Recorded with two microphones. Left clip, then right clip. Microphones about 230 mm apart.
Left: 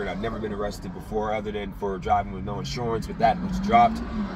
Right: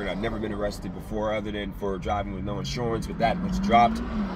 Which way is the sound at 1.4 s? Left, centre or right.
Centre.